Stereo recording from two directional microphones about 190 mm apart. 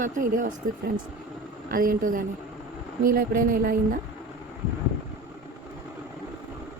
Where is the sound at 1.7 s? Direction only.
50° right (ahead or behind).